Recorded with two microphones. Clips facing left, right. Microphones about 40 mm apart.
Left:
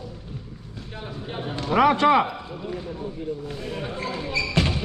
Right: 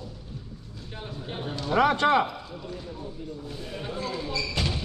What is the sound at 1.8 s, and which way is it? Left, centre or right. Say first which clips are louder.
Speech: left 4 dB; centre.